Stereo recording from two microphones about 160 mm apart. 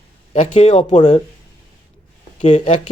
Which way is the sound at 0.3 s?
50° left (ahead or behind).